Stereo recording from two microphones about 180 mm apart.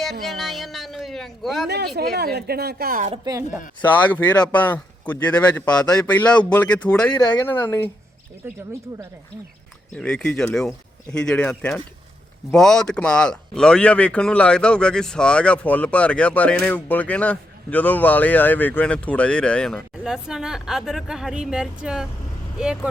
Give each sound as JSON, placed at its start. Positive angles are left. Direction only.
{"t": 0.0, "sound": "a sound", "side_deg": 0}
{"t": 1.6, "sound": "speech", "side_deg": -65}
{"t": 3.1, "sound": "speech", "side_deg": -20}
{"t": 4.3, "sound": "speech", "side_deg": 10}
{"t": 8.4, "sound": "speech", "side_deg": -10}
{"t": 9.9, "sound": "speech", "side_deg": 5}